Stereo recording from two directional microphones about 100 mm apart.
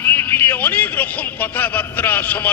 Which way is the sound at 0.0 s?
20° left (ahead or behind).